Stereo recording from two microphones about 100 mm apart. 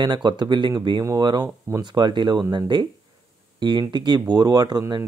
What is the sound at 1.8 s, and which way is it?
Speech, 50° right (ahead or behind).